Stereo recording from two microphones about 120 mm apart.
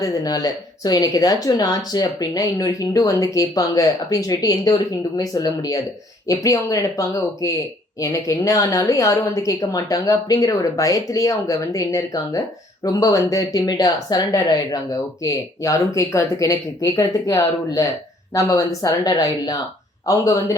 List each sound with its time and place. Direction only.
0.0 s a woman's voice: 30° left (ahead or behind)